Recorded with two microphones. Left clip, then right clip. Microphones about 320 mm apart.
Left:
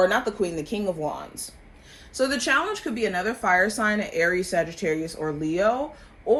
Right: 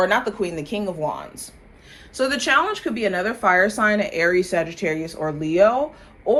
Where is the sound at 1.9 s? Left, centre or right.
Centre.